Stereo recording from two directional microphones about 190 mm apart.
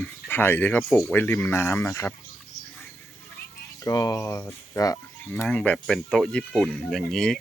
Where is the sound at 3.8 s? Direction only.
20° left (ahead or behind).